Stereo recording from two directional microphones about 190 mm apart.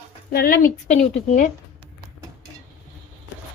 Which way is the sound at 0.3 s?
50° left (ahead or behind).